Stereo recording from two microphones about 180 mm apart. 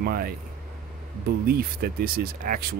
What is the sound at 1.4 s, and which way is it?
Speech, 60° right (ahead or behind).